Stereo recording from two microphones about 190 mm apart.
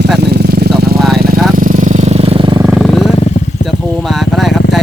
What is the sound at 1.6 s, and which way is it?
Jackhammer, 45° right (ahead or behind).